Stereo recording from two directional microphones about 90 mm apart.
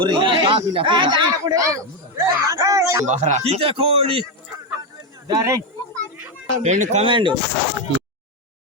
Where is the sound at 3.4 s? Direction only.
90° right.